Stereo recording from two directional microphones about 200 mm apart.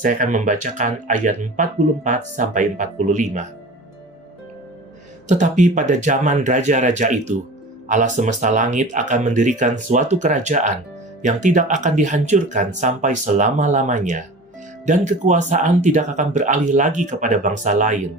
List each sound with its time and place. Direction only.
0.0 s speech: 40° right (ahead or behind)
5.3 s speech: 35° right (ahead or behind)